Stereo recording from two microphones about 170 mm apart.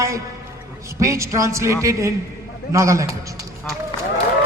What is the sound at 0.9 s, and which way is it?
A man's voice, 20° right (ahead or behind).